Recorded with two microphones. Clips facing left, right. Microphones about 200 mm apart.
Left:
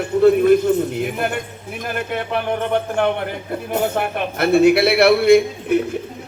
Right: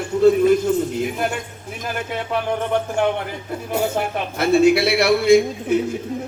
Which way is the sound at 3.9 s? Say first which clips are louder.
Left 1 dB; 60° left (ahead or behind).